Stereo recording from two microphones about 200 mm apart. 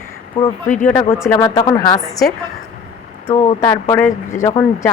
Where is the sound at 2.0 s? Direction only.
Centre (ahead or behind).